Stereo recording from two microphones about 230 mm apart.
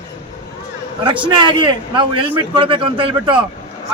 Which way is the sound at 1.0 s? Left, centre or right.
Right.